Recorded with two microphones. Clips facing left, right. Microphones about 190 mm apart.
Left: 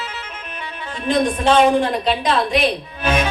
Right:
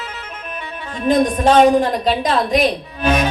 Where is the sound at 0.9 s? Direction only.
45° right (ahead or behind).